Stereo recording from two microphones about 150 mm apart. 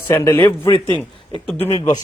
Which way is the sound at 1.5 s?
45° left (ahead or behind).